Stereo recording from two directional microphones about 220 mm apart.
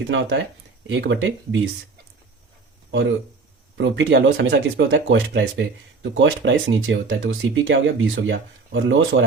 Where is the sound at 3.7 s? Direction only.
55° right (ahead or behind).